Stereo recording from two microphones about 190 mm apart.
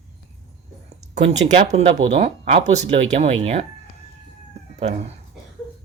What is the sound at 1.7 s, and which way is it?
Speech, 35° right (ahead or behind).